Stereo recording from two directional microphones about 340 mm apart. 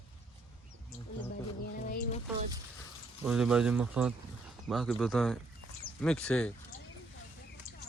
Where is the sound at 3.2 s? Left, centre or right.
Centre.